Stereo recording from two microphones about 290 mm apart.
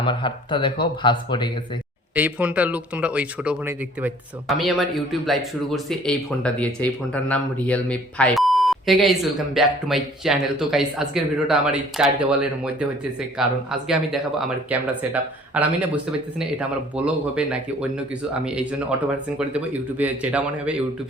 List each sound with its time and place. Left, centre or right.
0.0 s speech: centre
2.1 s speech: centre